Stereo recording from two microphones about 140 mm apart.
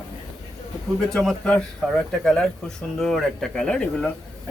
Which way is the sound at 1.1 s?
5° left (ahead or behind).